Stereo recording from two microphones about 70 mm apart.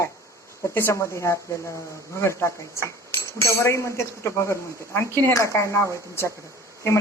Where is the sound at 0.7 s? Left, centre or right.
Left.